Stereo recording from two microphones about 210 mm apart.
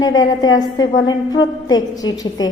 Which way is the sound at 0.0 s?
20° left (ahead or behind).